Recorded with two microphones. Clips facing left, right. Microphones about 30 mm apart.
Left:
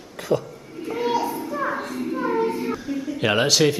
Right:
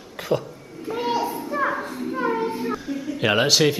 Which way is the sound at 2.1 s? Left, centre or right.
Centre.